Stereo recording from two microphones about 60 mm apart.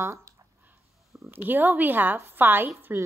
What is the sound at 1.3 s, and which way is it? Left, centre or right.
A woman's voice, right.